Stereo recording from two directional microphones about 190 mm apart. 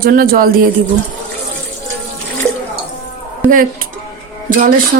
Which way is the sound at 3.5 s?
50° right (ahead or behind).